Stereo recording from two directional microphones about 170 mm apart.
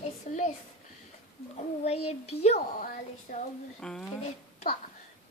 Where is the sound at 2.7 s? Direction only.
55° left (ahead or behind).